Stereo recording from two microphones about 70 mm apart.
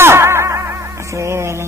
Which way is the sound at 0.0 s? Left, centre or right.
Right.